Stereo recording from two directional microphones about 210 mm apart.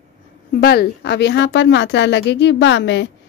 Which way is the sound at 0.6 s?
50° left (ahead or behind).